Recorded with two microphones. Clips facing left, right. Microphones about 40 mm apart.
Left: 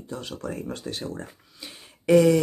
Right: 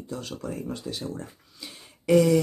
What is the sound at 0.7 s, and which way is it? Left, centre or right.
Speech, left.